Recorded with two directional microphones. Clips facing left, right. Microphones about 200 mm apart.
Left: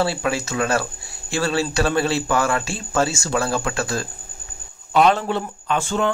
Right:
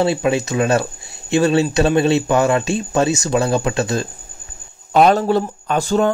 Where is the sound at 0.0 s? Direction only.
20° right (ahead or behind).